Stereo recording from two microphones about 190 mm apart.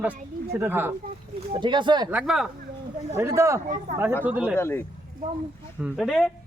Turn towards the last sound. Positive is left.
turn(degrees=0)  # may be behind; listen again after turning